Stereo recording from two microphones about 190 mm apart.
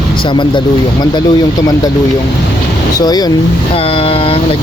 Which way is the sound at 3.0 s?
20° left (ahead or behind).